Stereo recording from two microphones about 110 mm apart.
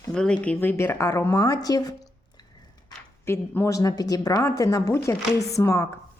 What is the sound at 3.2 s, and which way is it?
A woman's voice, 25° left (ahead or behind).